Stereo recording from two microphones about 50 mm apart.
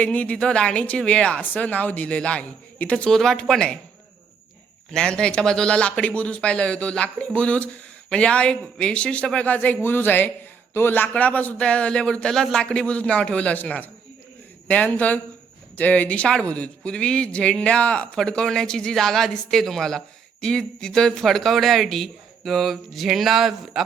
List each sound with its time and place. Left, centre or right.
0.0 s speech: left
3.1 s speech: centre
4.9 s speech: centre; by 9.7 s left
9.8 s speech: left
11.1 s speech: left; by 23.8 s centre